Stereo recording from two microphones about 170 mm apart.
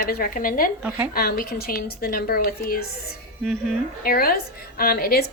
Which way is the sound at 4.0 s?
60° left (ahead or behind).